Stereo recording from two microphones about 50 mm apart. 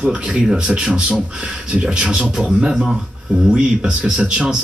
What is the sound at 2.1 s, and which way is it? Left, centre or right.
Speech, centre.